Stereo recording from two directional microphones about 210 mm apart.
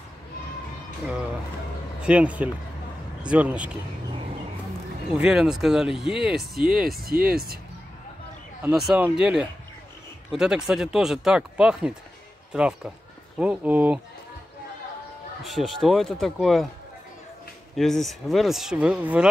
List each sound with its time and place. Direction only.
2.0 s speech: 5° right (ahead or behind)
5.2 s speech: 5° right (ahead or behind)
6.6 s speech: 45° right (ahead or behind)
8.6 s speech: 5° right (ahead or behind)
15.4 s speech: centre (ahead or behind)
17.7 s speech: centre (ahead or behind)